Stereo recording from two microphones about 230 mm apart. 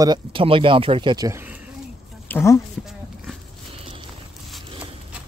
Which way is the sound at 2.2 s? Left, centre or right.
Centre.